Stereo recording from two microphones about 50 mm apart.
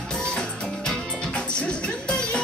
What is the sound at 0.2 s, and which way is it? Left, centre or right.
Music, centre.